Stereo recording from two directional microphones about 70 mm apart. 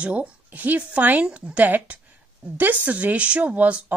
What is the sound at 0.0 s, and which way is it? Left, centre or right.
A woman's voice, centre.